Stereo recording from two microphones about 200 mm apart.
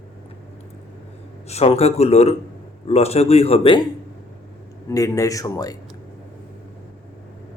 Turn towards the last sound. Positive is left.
turn(degrees=15)  # may be behind; listen again after turning